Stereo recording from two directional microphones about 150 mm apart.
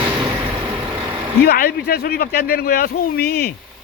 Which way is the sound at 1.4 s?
90° left.